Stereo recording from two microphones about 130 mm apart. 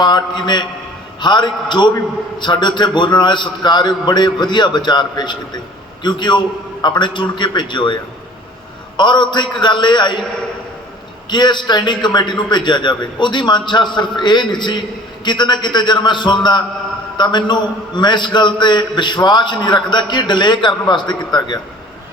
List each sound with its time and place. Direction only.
0.0 s a man's voice: 35° left (ahead or behind)
9.0 s a man's voice: 35° left (ahead or behind)
11.3 s a man's voice: 35° left (ahead or behind)